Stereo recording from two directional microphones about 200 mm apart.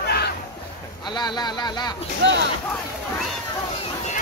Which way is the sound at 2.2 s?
65° right (ahead or behind).